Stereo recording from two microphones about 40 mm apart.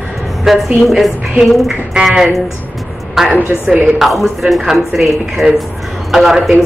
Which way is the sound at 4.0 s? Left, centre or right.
Centre.